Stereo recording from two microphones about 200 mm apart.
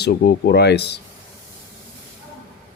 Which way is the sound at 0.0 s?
55° left (ahead or behind).